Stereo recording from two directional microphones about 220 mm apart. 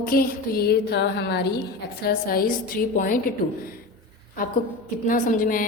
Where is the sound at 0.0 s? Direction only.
40° left (ahead or behind).